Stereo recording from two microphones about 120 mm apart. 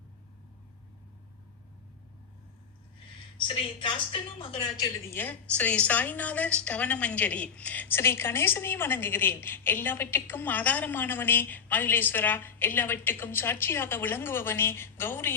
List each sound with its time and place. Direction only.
3.3 s a woman's voice: 45° left (ahead or behind)
5.1 s a woman's voice: 15° left (ahead or behind)